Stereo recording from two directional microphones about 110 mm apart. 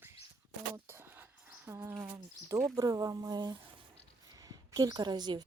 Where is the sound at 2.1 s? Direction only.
30° right (ahead or behind).